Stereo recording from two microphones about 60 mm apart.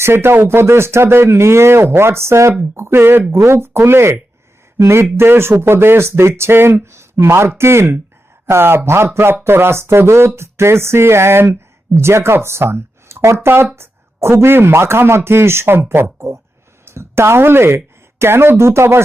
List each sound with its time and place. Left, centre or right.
0.0 s speech: right
3.3 s speech: right
16.1 s speech: right